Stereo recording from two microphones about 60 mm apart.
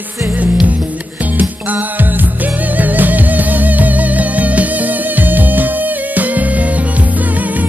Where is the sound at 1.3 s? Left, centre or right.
Right.